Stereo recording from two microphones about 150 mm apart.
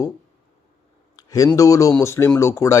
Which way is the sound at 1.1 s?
25° left (ahead or behind).